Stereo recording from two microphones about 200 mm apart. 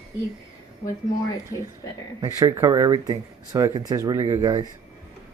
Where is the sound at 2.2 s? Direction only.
15° right (ahead or behind).